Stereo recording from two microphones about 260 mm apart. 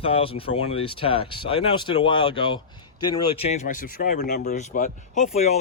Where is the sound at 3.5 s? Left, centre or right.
Left.